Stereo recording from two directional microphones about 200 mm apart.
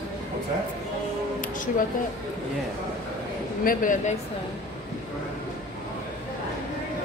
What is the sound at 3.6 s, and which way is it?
Speech, 40° left (ahead or behind).